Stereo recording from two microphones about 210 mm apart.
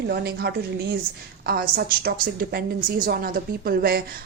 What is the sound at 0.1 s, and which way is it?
A woman's voice, 50° right (ahead or behind).